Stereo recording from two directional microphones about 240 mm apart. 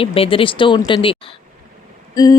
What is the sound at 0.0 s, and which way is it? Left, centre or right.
Speech, left.